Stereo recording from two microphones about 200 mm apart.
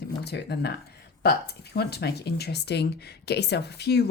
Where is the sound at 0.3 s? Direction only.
55° left (ahead or behind).